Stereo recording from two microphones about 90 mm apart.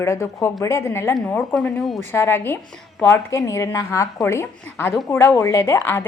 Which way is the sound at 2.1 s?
25° left (ahead or behind).